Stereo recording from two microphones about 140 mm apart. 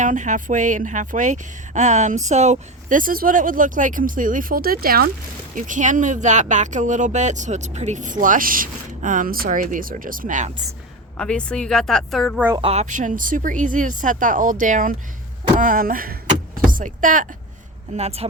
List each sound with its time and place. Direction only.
0.0 s a woman's voice: 60° right (ahead or behind); by 5.1 s 90° right
5.5 s speech: 65° right (ahead or behind)
11.2 s speech: 10° left (ahead or behind)
12.6 s a woman's voice: 55° right (ahead or behind); by 16.1 s 90° right
16.6 s speech: 75° right (ahead or behind)
17.9 s speech: 50° right (ahead or behind)